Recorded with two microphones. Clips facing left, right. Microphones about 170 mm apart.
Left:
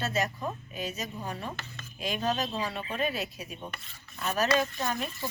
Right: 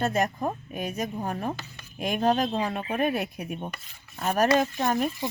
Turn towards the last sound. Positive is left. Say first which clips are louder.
# right 5 dB
turn(degrees=-50)  # may be behind; listen again after turning